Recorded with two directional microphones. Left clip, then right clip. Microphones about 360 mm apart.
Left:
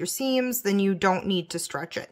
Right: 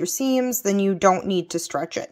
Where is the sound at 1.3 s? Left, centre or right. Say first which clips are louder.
Right 5 dB; centre.